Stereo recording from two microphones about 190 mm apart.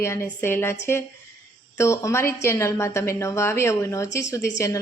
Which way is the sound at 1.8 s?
15° left (ahead or behind).